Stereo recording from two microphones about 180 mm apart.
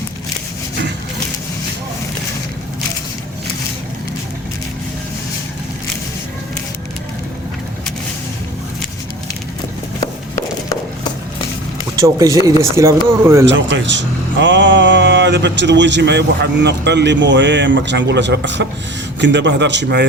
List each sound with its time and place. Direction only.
11.9 s speech: 20° right (ahead or behind)
13.4 s speech: 90° right; by 20.1 s 75° right (ahead or behind)